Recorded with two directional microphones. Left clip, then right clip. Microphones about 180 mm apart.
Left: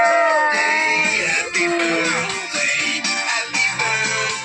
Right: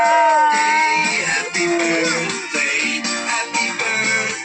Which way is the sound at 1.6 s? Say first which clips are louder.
Right 1 dB; 15° right (ahead or behind).